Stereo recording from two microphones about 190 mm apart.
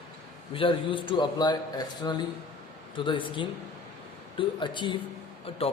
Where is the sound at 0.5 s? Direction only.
25° left (ahead or behind).